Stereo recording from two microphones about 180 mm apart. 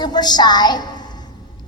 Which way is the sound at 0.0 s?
25° left (ahead or behind).